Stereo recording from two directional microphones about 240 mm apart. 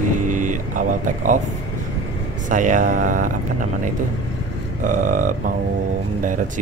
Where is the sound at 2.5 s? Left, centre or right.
Right.